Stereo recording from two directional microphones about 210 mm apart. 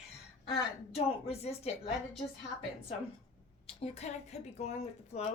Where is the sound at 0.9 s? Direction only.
30° left (ahead or behind).